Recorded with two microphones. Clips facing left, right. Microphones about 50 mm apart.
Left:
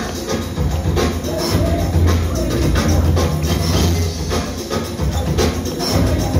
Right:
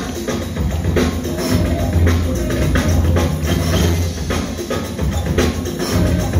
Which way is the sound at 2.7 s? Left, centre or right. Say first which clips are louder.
Even; right.